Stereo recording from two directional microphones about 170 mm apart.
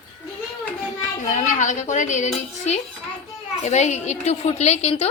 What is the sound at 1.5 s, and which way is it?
Speech, 45° left (ahead or behind).